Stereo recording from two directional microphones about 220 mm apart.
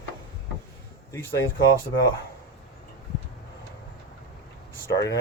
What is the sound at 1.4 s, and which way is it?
Speech, 15° left (ahead or behind).